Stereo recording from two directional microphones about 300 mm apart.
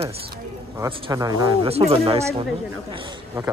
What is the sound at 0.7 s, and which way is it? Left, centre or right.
Speech, centre.